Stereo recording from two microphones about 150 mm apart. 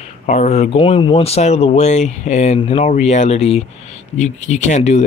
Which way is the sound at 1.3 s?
45° left (ahead or behind).